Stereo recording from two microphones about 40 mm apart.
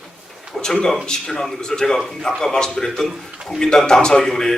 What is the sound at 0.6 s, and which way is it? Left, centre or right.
A man's voice, centre.